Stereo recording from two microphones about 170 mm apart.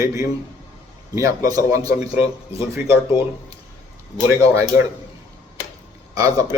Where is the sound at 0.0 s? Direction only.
20° right (ahead or behind).